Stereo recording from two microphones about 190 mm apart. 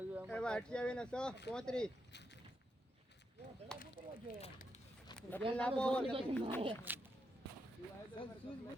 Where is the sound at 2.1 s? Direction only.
65° left (ahead or behind).